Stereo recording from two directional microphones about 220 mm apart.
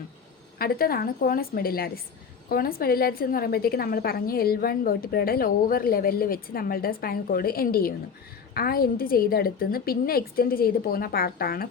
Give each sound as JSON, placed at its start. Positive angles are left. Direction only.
{"t": 0.6, "sound": "a woman's voice", "side_deg": 40}